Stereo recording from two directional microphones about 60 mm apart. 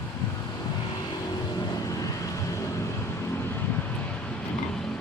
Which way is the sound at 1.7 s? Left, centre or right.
Left.